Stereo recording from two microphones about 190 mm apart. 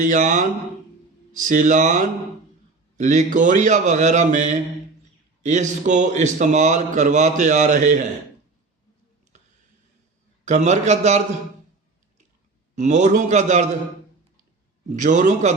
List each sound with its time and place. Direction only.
0.0 s a man's voice: 40° right (ahead or behind)
10.4 s a man's voice: 40° right (ahead or behind)
12.7 s a man's voice: 40° right (ahead or behind)
14.9 s a man's voice: 40° right (ahead or behind)